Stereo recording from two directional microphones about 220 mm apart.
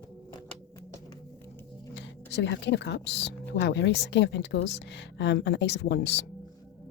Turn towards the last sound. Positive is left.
turn(degrees=50)  # may be behind; listen again after turning